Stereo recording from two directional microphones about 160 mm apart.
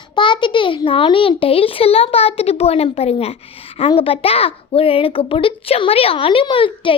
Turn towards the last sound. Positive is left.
turn(degrees=30)  # may be behind; listen again after turning